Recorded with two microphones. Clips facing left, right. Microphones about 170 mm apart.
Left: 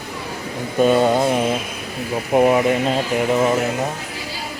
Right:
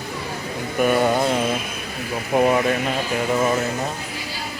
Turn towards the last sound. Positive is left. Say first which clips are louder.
# left 3 dB
turn(degrees=20)  # may be behind; listen again after turning